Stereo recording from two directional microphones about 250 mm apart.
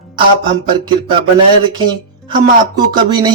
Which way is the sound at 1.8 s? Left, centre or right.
Centre.